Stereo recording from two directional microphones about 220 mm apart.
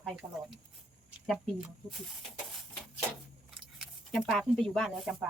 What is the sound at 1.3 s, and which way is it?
Speech, centre (ahead or behind).